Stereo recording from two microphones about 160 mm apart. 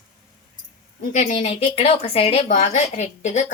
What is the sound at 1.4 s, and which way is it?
A woman's voice, 40° left (ahead or behind).